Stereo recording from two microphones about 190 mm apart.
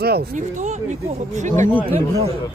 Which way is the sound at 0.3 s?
40° right (ahead or behind).